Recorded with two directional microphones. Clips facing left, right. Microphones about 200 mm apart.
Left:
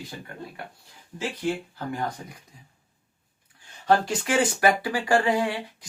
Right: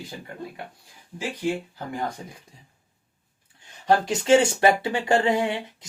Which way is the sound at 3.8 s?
20° right (ahead or behind).